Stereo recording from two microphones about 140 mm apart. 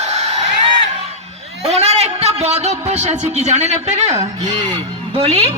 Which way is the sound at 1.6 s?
50° right (ahead or behind).